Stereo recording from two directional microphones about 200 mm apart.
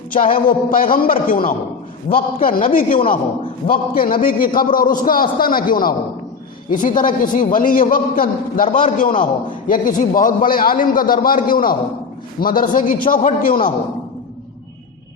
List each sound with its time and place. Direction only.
0.1 s a man's voice: 45° left (ahead or behind)